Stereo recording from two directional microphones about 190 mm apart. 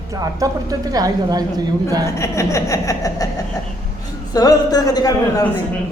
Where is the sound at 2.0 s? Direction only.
15° left (ahead or behind).